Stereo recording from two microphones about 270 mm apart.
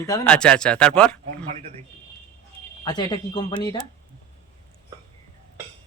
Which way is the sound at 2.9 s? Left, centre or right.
Centre.